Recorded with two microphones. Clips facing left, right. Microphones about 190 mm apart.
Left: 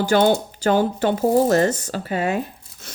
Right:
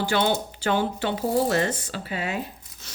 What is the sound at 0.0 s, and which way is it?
Speech, 45° left (ahead or behind).